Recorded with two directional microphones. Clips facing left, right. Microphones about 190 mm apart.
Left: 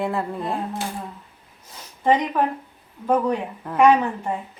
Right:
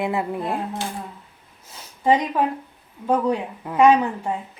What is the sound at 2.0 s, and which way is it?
Speech, 10° right (ahead or behind).